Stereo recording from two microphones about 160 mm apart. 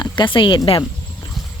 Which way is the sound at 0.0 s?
30° left (ahead or behind).